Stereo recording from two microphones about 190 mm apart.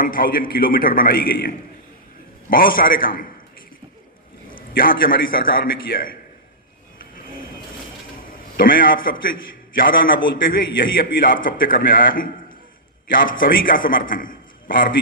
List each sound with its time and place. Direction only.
0.0 s a man's voice: 50° left (ahead or behind)
4.5 s a man's voice: 50° left (ahead or behind)
8.5 s a man's voice: 50° left (ahead or behind)